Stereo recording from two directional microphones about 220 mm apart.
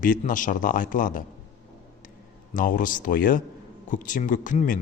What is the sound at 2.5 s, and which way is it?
Speech, 40° left (ahead or behind).